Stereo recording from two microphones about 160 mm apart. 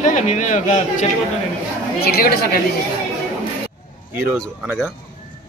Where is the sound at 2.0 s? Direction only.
75° left (ahead or behind).